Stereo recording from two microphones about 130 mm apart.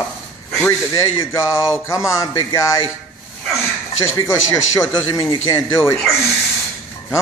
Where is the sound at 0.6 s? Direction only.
20° left (ahead or behind).